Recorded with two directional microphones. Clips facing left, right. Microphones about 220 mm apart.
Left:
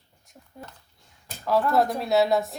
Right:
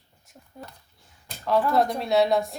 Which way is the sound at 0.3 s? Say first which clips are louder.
Even; 5° right (ahead or behind).